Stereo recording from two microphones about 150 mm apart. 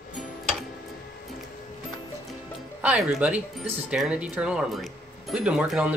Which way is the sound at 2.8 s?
5° right (ahead or behind).